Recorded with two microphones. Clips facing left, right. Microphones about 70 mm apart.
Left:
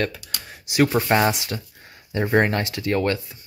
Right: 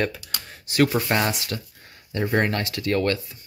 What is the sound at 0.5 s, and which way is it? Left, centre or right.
Speech, centre.